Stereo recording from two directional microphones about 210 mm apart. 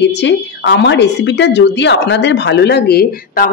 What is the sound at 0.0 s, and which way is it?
A woman's voice, 55° left (ahead or behind).